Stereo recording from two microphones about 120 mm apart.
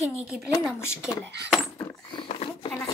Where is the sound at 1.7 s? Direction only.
40° left (ahead or behind).